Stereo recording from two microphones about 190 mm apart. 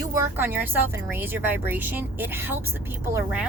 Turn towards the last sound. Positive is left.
turn(degrees=-10)  # may be behind; listen again after turning